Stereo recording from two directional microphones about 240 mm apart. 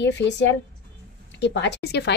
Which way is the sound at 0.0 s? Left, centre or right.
Left.